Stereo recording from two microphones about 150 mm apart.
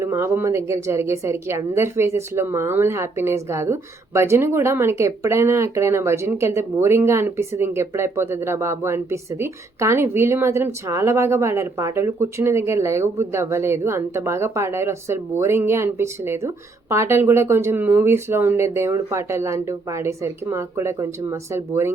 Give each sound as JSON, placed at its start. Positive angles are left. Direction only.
{"t": 0.0, "sound": "a woman's voice", "side_deg": -15}